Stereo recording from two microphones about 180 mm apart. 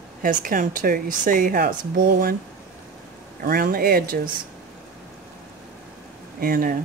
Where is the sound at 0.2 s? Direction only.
50° right (ahead or behind).